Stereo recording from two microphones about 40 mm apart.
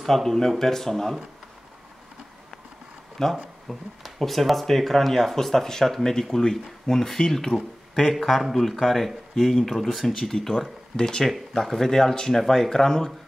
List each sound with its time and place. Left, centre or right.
0.0 s speech: centre
3.2 s speech: centre
3.6 s speech: centre
11.0 s speech: centre